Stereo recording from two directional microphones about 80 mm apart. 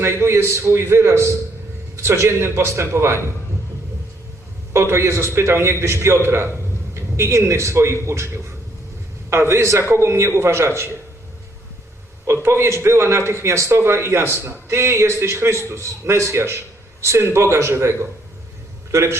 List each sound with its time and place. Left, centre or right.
0.0 s a man's voice: right
4.7 s a man's voice: right
9.3 s a man's voice: right
12.2 s a man's voice: right